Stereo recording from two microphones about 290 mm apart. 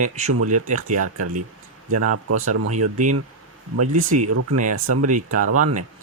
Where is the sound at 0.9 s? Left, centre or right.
Right.